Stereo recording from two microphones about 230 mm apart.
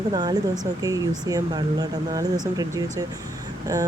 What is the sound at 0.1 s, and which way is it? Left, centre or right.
Speech, centre.